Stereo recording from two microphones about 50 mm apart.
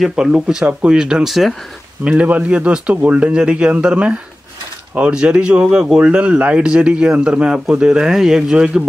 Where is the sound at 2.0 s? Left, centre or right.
Right.